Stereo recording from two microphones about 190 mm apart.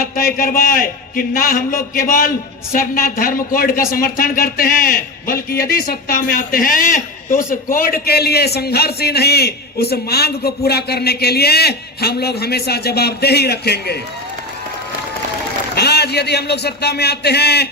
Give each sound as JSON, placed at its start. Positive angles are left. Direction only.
{"t": 0.0, "sound": "a man's voice", "side_deg": 50}
{"t": 15.7, "sound": "a man's voice", "side_deg": 60}